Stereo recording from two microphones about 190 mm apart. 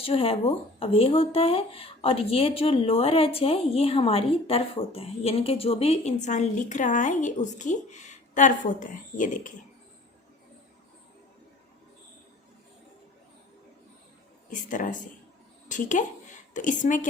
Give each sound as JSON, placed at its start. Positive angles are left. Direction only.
{"t": 0.0, "sound": "speech", "side_deg": 30}
{"t": 14.5, "sound": "a woman's voice", "side_deg": 45}